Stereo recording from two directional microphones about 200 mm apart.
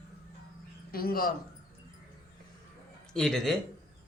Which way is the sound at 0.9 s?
45° left (ahead or behind).